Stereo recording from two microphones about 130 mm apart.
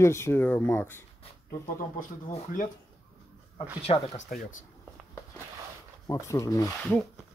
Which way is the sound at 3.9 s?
55° left (ahead or behind).